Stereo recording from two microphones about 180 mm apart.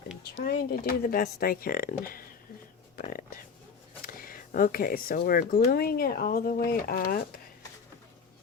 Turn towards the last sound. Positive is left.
turn(degrees=55)  # may be behind; listen again after turning